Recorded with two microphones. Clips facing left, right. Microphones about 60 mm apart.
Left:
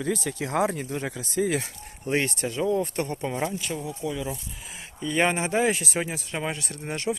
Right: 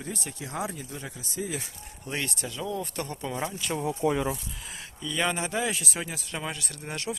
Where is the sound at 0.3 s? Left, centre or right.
Left.